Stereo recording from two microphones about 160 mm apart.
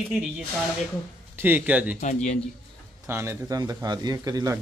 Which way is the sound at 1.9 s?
45° left (ahead or behind).